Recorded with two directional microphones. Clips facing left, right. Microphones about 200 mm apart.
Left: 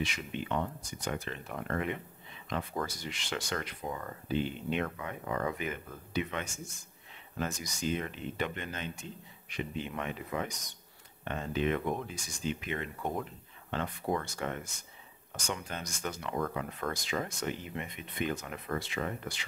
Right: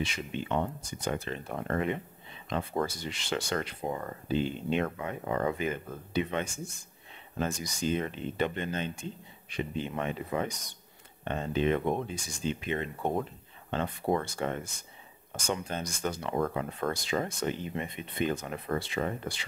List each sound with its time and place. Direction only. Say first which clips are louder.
0.0 s speech: right 2 dB; 30° right (ahead or behind)